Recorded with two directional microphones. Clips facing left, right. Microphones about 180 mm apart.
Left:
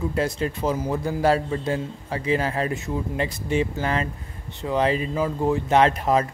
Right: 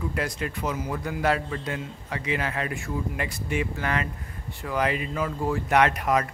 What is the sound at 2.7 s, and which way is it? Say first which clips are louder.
Speech: left 3 dB; 25° left (ahead or behind).